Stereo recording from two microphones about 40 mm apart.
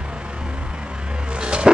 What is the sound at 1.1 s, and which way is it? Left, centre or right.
Music, right.